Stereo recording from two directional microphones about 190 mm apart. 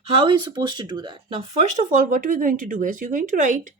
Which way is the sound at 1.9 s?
45° right (ahead or behind).